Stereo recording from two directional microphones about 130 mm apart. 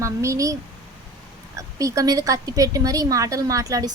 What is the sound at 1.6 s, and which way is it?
A woman's voice, 25° right (ahead or behind).